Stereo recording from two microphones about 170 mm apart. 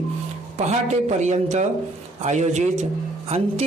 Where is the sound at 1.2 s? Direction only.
45° right (ahead or behind).